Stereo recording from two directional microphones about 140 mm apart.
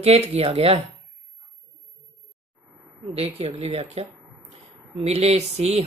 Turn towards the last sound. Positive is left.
turn(degrees=-50)  # may be behind; listen again after turning